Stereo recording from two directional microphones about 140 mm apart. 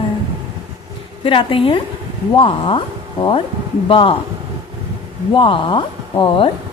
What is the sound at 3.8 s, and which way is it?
Speech, 40° left (ahead or behind).